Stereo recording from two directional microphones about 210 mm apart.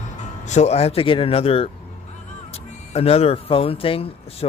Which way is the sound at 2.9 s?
30° left (ahead or behind).